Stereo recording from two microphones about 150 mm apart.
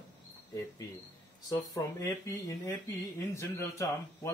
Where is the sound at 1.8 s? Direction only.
20° left (ahead or behind).